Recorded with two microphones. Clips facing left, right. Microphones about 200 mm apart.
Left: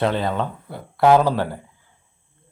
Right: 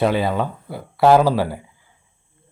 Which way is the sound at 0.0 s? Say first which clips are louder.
Right 3 dB; 10° right (ahead or behind).